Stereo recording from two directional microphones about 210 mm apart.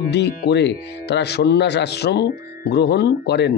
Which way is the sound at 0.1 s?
55° left (ahead or behind).